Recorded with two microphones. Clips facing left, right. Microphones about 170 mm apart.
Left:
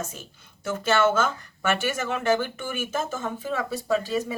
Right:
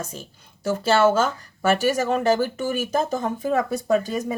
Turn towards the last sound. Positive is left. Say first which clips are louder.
# right 3 dB
turn(degrees=-45)  # may be behind; listen again after turning